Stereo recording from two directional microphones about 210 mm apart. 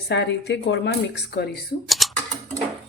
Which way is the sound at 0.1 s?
55° left (ahead or behind).